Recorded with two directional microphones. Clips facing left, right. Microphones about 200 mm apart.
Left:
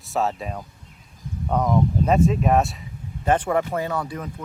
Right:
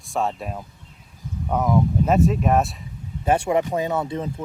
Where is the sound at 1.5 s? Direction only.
5° right (ahead or behind).